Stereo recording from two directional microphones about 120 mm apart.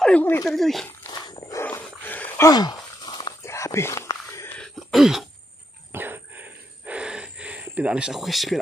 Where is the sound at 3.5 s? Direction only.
25° left (ahead or behind).